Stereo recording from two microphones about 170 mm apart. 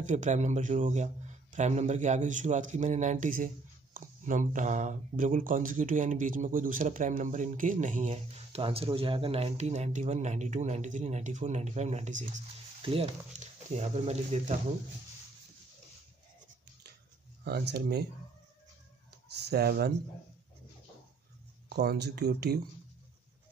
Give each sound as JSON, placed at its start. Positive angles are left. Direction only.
{"t": 0.0, "sound": "speech", "side_deg": -45}
{"t": 12.8, "sound": "speech", "side_deg": -35}
{"t": 17.5, "sound": "speech", "side_deg": -70}
{"t": 19.3, "sound": "speech", "side_deg": -75}
{"t": 21.6, "sound": "speech", "side_deg": -70}